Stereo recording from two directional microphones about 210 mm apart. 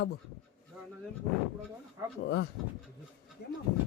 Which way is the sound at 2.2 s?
60° left (ahead or behind).